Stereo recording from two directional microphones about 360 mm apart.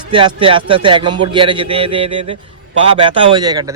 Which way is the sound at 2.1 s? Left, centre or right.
Right.